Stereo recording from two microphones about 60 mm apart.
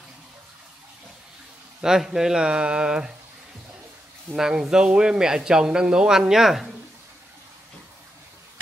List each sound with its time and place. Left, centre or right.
1.8 s speech: centre
4.4 s speech: centre